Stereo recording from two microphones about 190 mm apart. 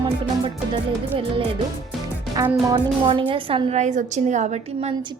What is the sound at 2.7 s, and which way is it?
A woman's voice, 25° right (ahead or behind).